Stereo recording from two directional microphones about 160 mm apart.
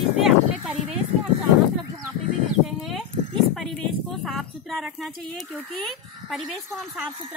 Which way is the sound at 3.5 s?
Centre (ahead or behind).